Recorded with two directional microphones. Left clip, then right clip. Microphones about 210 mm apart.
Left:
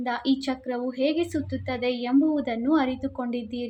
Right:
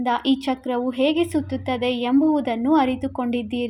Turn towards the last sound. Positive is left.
turn(degrees=-25)  # may be behind; listen again after turning